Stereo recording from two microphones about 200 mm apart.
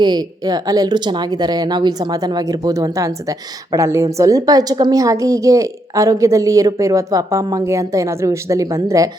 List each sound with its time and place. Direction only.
0.0 s speech: 20° right (ahead or behind)